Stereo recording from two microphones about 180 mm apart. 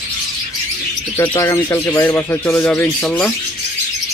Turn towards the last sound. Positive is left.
turn(degrees=10)  # may be behind; listen again after turning